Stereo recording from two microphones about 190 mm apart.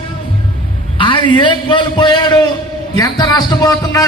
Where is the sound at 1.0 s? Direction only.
25° left (ahead or behind).